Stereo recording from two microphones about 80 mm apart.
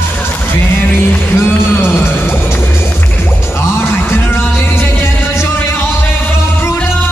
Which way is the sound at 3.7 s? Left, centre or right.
Left.